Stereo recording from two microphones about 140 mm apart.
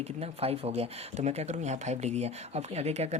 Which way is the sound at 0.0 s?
45° right (ahead or behind).